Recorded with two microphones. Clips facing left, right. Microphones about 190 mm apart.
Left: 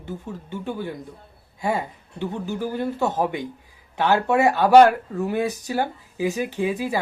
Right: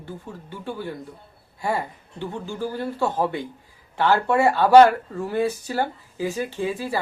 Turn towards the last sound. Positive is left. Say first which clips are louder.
# left 2 dB
turn(degrees=15)  # may be behind; listen again after turning